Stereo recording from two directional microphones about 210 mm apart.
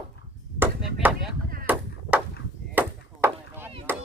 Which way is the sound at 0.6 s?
5° right (ahead or behind).